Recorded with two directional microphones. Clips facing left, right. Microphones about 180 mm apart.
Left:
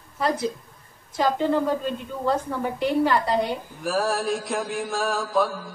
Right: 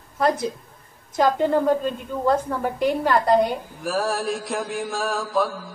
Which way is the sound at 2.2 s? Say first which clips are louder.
Right 3 dB; 45° right (ahead or behind).